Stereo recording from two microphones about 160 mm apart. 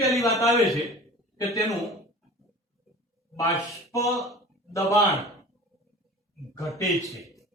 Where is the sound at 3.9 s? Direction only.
20° left (ahead or behind).